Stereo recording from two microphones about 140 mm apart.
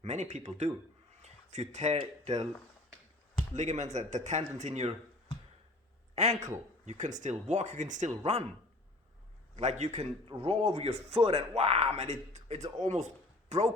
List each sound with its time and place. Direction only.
0.0 s speech: 55° right (ahead or behind)
3.5 s speech: 55° right (ahead or behind)
6.1 s a man's voice: 55° right (ahead or behind)
9.6 s a man's voice: 55° right (ahead or behind)